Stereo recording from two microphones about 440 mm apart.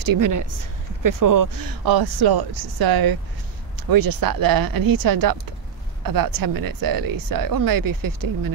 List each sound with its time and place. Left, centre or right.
0.0 s speech: right